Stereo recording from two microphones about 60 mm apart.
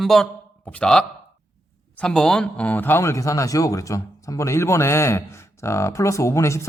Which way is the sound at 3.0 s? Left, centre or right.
Left.